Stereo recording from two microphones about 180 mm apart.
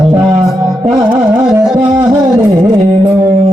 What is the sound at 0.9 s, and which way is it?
Carnatic music, 25° right (ahead or behind).